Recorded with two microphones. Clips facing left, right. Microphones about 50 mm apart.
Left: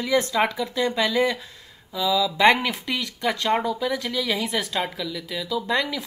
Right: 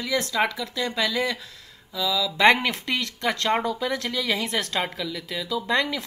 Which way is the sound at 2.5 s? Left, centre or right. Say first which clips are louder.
Right 3 dB; centre.